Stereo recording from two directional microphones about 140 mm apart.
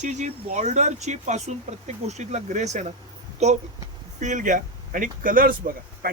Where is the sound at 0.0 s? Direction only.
60° right (ahead or behind).